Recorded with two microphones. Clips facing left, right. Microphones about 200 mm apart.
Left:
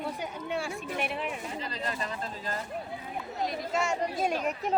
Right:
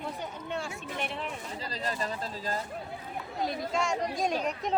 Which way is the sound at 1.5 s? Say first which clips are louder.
Even; 35° right (ahead or behind).